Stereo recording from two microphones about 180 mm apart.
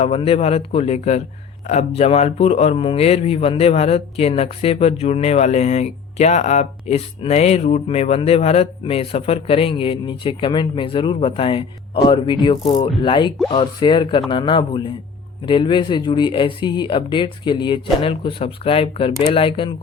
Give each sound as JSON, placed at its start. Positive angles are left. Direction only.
{"t": 0.0, "sound": "speech", "side_deg": 35}